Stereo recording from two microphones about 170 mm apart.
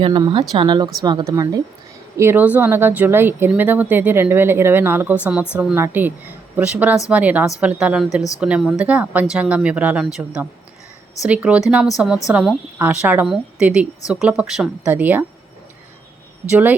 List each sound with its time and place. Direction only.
0.0 s a woman's voice: 30° right (ahead or behind); by 15.2 s 10° right (ahead or behind)
16.5 s speech: 10° right (ahead or behind)